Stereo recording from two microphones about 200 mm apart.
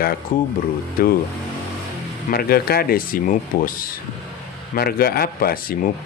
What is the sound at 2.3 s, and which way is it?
Speech, 50° left (ahead or behind).